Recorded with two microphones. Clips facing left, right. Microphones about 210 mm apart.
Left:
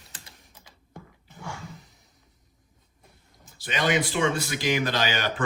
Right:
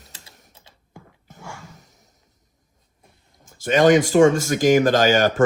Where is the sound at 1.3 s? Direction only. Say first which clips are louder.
Left 1 dB; 45° right (ahead or behind).